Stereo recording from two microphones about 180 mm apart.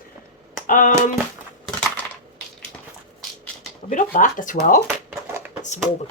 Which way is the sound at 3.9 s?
45° left (ahead or behind).